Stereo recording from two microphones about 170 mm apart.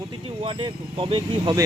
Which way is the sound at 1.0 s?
25° right (ahead or behind).